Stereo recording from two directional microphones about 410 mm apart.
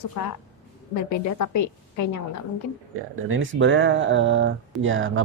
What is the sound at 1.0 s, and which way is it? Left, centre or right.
A woman's voice, left.